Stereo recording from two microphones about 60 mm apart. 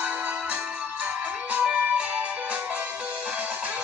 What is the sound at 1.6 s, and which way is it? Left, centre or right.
Music, centre.